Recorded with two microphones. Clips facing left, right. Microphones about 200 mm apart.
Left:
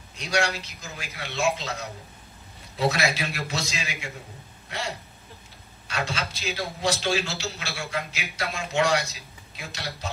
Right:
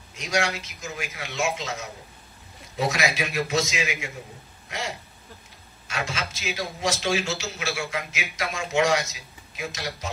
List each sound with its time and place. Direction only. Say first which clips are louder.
0.1 s a man's voice: even; 35° left (ahead or behind)